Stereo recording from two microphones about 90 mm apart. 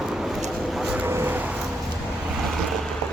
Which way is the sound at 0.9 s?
25° right (ahead or behind).